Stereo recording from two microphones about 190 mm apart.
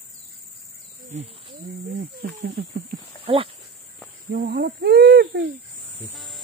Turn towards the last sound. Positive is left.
turn(degrees=-60)  # may be behind; listen again after turning